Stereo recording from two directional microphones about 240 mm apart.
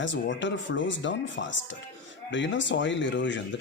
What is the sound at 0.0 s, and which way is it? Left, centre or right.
Speech, left.